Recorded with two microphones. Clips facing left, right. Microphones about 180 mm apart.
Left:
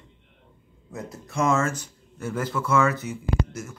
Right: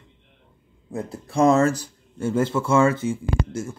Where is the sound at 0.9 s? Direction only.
30° right (ahead or behind).